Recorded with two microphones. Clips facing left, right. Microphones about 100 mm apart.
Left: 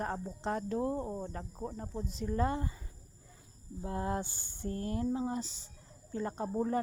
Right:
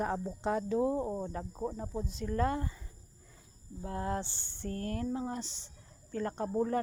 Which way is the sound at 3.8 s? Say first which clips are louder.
Even; 25° left (ahead or behind).